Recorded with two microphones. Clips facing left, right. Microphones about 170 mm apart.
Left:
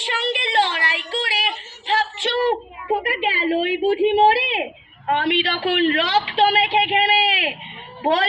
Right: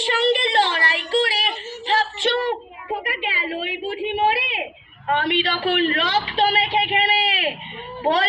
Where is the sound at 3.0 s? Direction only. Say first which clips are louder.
Left 5 dB; 35° left (ahead or behind).